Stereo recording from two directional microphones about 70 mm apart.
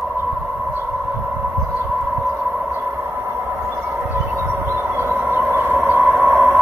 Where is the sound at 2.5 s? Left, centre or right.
Right.